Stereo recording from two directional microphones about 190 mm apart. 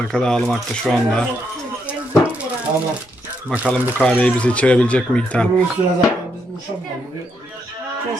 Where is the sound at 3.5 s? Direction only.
5° left (ahead or behind).